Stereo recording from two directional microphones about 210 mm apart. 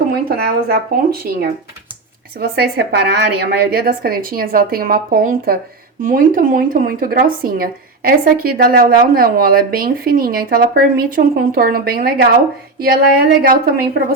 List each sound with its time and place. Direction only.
0.3 s speech: 45° right (ahead or behind)